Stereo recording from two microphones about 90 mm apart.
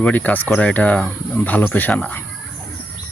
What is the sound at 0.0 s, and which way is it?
Speech, 15° left (ahead or behind).